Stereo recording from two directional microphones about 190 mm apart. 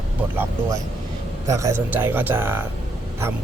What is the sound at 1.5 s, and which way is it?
Speech, 15° right (ahead or behind).